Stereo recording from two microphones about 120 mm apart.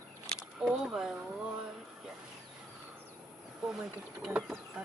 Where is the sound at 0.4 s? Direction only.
5° right (ahead or behind).